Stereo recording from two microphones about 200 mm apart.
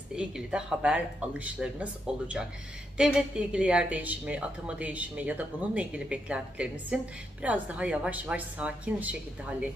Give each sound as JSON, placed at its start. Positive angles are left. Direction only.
{"t": 0.1, "sound": "a woman's voice", "side_deg": -5}